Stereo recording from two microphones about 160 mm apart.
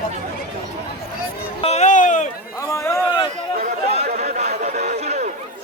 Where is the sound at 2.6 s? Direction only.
20° left (ahead or behind).